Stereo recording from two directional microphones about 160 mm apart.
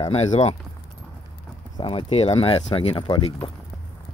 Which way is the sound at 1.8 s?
35° left (ahead or behind).